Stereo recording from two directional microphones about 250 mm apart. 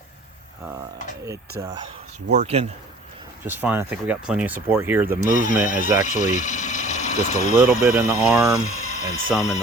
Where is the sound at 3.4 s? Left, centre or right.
Centre.